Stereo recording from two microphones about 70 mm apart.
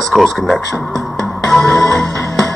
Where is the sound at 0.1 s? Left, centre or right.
Centre.